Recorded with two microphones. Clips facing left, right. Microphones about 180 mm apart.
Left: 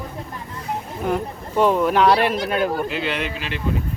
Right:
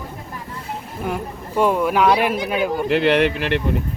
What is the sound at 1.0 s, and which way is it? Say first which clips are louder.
Speech: left 2 dB; 10° right (ahead or behind).